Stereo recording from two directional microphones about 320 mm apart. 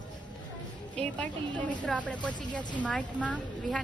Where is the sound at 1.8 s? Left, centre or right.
Centre.